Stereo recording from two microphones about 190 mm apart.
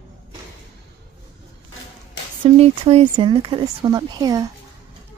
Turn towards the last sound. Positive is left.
turn(degrees=-20)  # may be behind; listen again after turning